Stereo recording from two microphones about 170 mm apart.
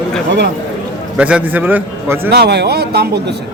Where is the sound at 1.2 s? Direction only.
10° right (ahead or behind).